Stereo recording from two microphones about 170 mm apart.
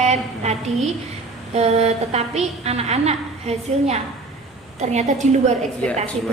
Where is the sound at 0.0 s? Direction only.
40° right (ahead or behind).